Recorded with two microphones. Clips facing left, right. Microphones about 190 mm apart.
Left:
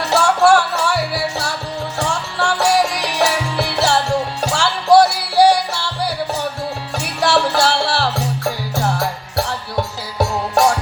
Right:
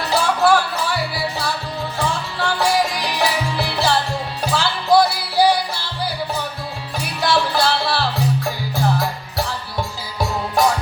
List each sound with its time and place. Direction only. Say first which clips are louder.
0.0 s music: left 3 dB; 75° left (ahead or behind)